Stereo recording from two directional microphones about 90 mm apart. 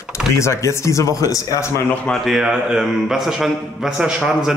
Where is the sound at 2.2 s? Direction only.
5° right (ahead or behind).